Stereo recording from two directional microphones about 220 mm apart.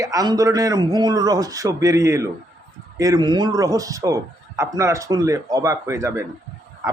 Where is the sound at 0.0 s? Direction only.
15° right (ahead or behind).